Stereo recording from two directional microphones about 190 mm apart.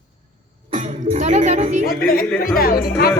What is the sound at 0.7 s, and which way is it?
Speech, 35° right (ahead or behind).